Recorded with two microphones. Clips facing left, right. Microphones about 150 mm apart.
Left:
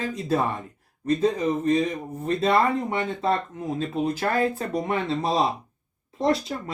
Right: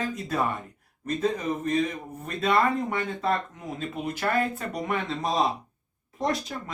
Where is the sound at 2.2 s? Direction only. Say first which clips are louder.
Left 3 dB; 30° left (ahead or behind).